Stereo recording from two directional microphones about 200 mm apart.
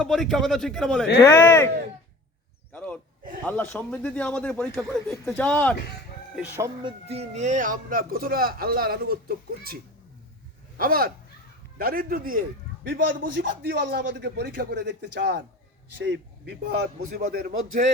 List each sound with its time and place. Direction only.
0.0 s a man's voice: centre (ahead or behind)
1.2 s speech: 15° left (ahead or behind)
2.7 s a sound: 5° left (ahead or behind)
3.4 s speech: 10° left (ahead or behind)
6.3 s speech: 10° right (ahead or behind)
6.8 s speech: 30° right (ahead or behind); by 9.7 s 50° right (ahead or behind)
10.8 s a man's voice: 45° right (ahead or behind)